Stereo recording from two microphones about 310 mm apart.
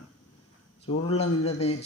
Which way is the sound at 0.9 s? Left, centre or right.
Centre.